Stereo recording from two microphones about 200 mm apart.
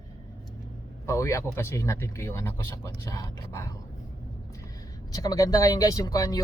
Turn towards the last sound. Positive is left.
turn(degrees=20)  # may be behind; listen again after turning